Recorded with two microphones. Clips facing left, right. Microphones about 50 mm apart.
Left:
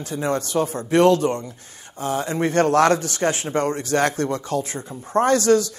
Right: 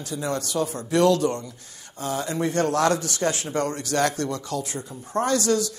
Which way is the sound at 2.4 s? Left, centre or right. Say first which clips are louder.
Left 5 dB; left.